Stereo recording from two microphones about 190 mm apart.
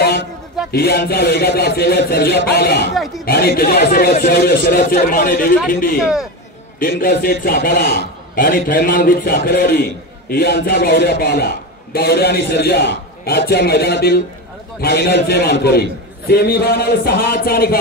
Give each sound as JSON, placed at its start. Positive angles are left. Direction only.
{"t": 0.7, "sound": "a man's voice", "side_deg": 55}